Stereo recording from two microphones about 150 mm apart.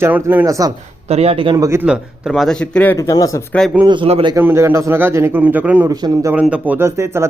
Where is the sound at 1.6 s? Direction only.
20° right (ahead or behind).